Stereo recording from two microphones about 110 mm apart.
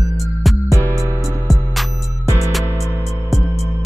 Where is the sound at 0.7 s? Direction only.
25° left (ahead or behind).